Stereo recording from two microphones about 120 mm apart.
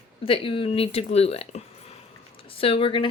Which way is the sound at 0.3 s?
50° left (ahead or behind).